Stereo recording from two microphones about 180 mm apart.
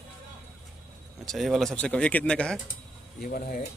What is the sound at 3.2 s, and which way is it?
Speech, 50° left (ahead or behind).